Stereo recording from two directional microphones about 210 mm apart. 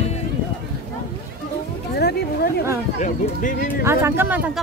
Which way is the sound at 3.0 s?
35° left (ahead or behind).